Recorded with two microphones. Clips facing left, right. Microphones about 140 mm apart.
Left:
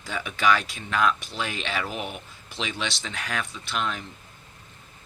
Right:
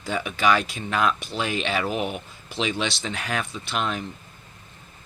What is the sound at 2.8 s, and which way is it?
Speech, 25° right (ahead or behind).